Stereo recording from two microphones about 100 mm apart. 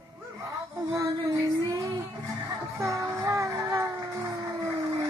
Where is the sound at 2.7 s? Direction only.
30° right (ahead or behind).